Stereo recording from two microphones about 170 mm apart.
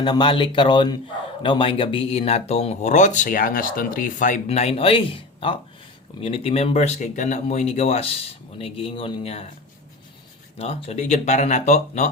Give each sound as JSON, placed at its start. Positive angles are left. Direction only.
{"t": 0.0, "sound": "speech", "side_deg": 25}
{"t": 4.4, "sound": "speech", "side_deg": 35}
{"t": 10.6, "sound": "speech", "side_deg": 35}